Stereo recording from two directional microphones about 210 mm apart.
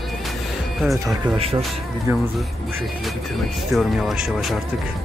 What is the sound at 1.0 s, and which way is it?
Speech, 20° right (ahead or behind).